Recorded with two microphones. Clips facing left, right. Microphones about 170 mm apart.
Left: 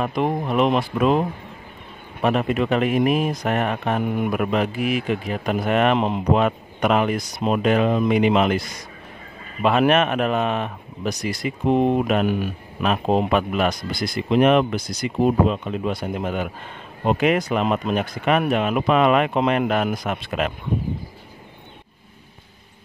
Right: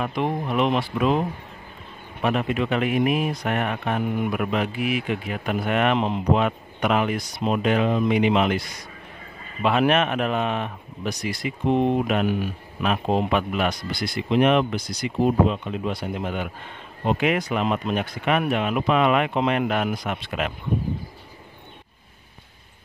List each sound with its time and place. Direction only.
0.0 s speech: 40° left (ahead or behind)
2.2 s speech: 40° left (ahead or behind)
5.9 s speech: 50° left (ahead or behind)